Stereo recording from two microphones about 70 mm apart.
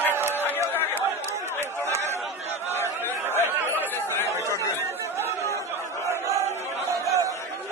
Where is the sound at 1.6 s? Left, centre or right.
Right.